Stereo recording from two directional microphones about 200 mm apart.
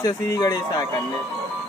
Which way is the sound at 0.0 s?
15° left (ahead or behind).